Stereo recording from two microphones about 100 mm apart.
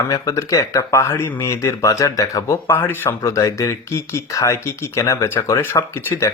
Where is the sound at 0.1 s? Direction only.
35° left (ahead or behind).